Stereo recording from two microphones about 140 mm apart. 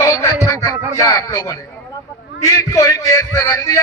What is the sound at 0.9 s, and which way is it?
Speech, 25° left (ahead or behind).